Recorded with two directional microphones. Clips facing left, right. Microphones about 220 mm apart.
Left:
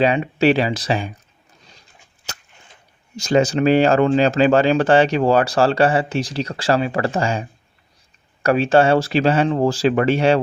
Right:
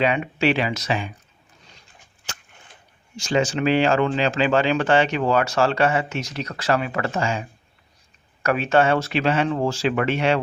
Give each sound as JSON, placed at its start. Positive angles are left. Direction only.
{"t": 0.0, "sound": "speech", "side_deg": 35}
{"t": 3.2, "sound": "speech", "side_deg": 40}
{"t": 8.4, "sound": "speech", "side_deg": 35}